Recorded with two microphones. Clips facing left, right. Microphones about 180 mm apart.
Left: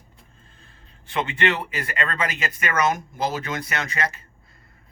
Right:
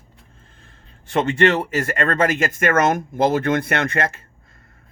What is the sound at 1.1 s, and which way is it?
Speech, 45° right (ahead or behind).